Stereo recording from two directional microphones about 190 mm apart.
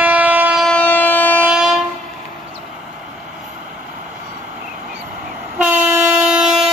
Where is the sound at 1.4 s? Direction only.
5° right (ahead or behind).